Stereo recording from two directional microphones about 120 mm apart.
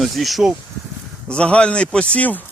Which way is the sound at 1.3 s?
10° left (ahead or behind).